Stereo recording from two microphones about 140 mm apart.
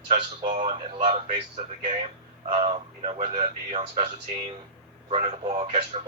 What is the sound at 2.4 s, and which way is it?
A man's voice, 40° right (ahead or behind).